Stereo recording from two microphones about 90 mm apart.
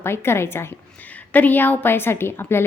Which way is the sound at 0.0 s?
25° left (ahead or behind).